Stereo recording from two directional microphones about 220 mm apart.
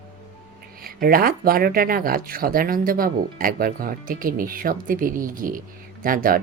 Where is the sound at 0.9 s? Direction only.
40° right (ahead or behind).